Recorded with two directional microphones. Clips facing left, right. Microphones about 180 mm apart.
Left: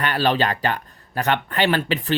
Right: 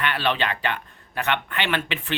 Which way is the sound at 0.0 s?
40° left (ahead or behind).